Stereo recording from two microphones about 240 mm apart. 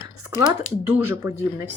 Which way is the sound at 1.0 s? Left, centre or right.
Centre.